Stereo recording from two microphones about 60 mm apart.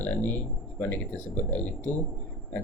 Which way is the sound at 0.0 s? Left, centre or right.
Left.